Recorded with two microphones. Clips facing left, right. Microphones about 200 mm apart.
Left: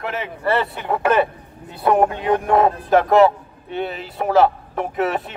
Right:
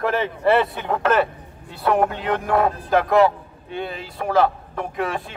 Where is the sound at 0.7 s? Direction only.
10° left (ahead or behind); by 3.3 s 25° left (ahead or behind).